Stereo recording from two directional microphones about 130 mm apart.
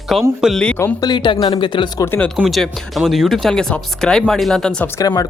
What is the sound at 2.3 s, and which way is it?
Speech, centre (ahead or behind).